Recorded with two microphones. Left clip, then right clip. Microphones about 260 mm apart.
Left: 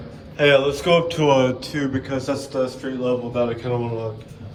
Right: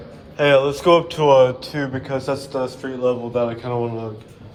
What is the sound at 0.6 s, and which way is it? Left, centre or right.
A man's voice, centre.